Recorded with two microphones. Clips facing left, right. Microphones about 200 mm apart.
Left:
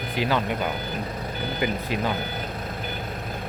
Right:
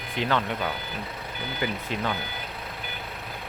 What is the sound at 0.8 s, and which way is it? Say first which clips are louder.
Reversing beeps: left 5 dB; 45° left (ahead or behind).